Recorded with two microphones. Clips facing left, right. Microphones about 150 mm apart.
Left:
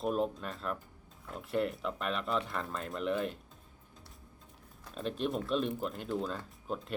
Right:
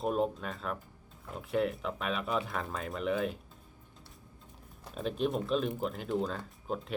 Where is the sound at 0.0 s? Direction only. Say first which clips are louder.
Right 1 dB; centre (ahead or behind).